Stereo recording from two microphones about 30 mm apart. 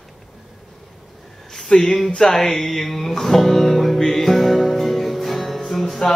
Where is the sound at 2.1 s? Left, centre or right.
Left.